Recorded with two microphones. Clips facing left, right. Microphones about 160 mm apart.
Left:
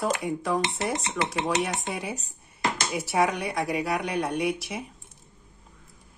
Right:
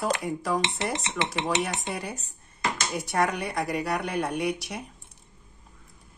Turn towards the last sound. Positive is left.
turn(degrees=0)  # may be behind; listen again after turning